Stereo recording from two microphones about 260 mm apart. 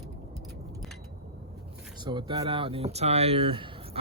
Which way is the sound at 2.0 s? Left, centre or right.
Centre.